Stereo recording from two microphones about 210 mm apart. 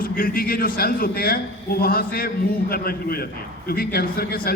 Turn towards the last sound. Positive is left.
turn(degrees=45)  # may be behind; listen again after turning